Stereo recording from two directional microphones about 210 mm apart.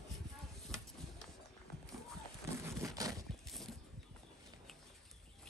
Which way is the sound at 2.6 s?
15° right (ahead or behind).